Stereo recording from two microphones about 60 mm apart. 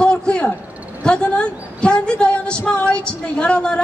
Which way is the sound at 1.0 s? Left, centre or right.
Centre.